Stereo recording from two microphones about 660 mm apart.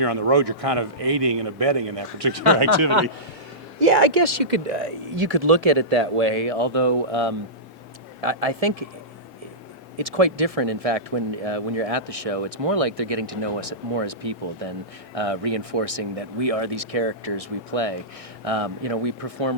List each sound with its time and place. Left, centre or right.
0.0 s speech: right
4.2 s speech: right
10.0 s speech: right